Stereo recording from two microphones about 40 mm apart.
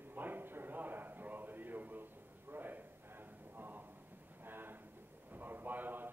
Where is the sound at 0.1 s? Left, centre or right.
Right.